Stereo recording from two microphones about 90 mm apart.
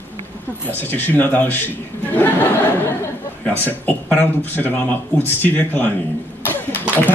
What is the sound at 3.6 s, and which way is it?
Speech, 20° left (ahead or behind).